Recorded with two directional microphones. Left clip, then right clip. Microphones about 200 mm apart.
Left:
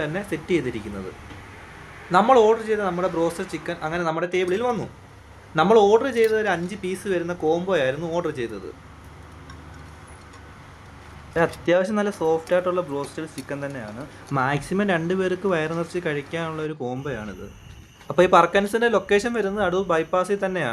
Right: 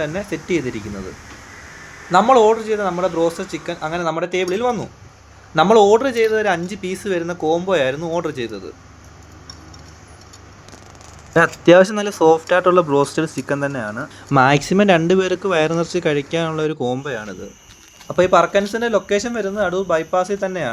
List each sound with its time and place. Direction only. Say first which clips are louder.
0.0 s speech: right 4 dB; 10° right (ahead or behind)
2.0 s speech: right 4 dB; 15° right (ahead or behind)
11.3 s speech: right 9 dB; 25° right (ahead or behind)
14.3 s speech: right 10 dB; 35° right (ahead or behind)
18.1 s speech: right 2 dB; centre (ahead or behind)